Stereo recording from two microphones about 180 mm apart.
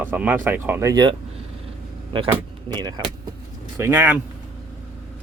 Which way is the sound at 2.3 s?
20° right (ahead or behind).